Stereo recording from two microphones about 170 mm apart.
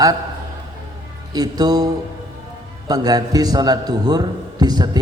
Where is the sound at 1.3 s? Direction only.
25° right (ahead or behind).